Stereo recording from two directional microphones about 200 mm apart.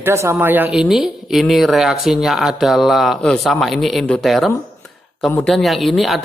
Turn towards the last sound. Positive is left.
turn(degrees=0)  # may be behind; listen again after turning